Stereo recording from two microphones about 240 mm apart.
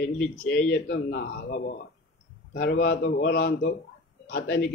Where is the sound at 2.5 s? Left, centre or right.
Left.